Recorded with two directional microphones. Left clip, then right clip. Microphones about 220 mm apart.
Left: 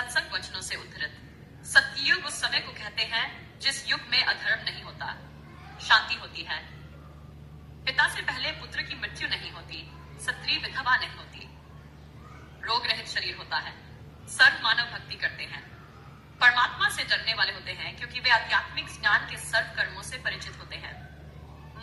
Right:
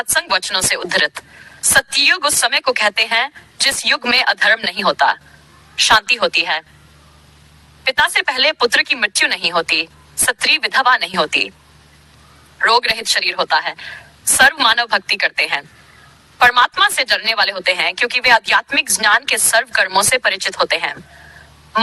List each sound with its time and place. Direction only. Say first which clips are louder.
0.1 s speech: right 13 dB; 50° right (ahead or behind)
7.9 s speech: right 11 dB; 50° right (ahead or behind)
12.6 s speech: right 15 dB; 50° right (ahead or behind)